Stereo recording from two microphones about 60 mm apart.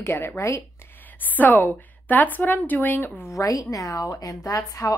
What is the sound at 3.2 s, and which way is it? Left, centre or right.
A woman's voice, left.